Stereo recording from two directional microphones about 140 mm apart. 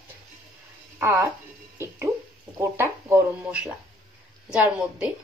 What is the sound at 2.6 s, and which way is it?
A woman's voice, 20° right (ahead or behind).